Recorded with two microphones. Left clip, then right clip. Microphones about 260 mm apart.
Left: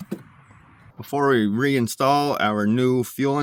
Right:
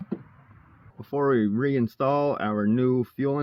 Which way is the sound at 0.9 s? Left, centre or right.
Left.